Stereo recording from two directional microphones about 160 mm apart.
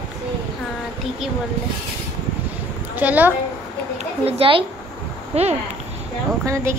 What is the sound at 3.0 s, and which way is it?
Speech, 10° right (ahead or behind).